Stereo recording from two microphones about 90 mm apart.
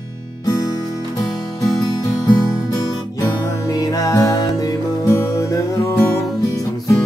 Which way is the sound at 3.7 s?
45° left (ahead or behind).